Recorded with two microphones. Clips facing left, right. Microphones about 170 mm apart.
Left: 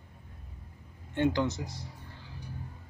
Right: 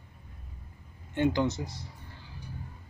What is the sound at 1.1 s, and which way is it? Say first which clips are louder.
Speech: right 1 dB; 10° right (ahead or behind).